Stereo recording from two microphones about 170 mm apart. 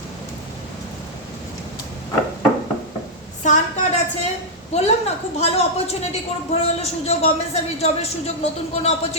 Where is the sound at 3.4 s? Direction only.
45° left (ahead or behind).